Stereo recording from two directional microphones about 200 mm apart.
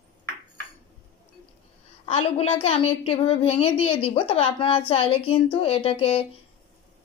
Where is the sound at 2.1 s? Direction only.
30° left (ahead or behind).